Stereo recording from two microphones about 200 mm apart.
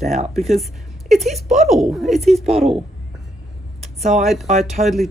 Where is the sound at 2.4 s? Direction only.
30° right (ahead or behind).